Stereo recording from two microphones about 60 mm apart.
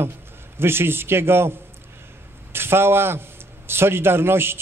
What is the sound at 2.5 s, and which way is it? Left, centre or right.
A man's voice, right.